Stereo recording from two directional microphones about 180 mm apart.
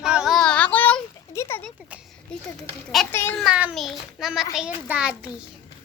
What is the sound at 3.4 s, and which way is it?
A woman's voice, 5° right (ahead or behind).